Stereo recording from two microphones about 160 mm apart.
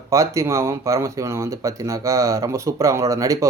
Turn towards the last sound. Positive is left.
turn(degrees=-20)  # may be behind; listen again after turning